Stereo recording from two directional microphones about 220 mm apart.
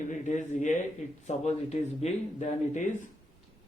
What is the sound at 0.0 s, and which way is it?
Speech, 35° left (ahead or behind).